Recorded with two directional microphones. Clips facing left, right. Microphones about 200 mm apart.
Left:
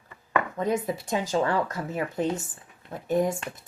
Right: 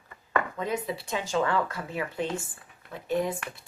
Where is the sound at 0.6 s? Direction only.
45° left (ahead or behind).